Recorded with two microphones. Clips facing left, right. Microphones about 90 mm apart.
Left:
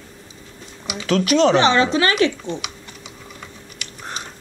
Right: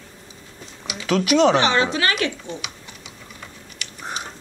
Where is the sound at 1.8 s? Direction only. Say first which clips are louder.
Left 5 dB; 30° left (ahead or behind).